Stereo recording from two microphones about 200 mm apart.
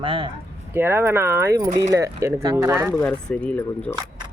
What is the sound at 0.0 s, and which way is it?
Speech, 25° right (ahead or behind).